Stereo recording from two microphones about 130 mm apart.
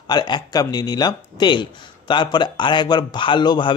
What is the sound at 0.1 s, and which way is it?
Speech, 35° left (ahead or behind).